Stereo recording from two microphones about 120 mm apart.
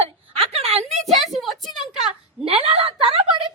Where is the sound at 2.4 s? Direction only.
55° right (ahead or behind).